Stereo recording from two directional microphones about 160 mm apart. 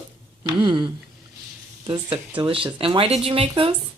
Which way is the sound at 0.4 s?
30° right (ahead or behind).